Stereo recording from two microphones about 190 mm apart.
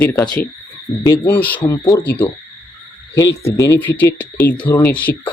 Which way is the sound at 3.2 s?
15° left (ahead or behind).